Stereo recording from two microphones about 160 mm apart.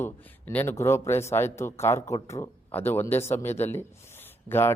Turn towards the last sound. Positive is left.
turn(degrees=15)  # may be behind; listen again after turning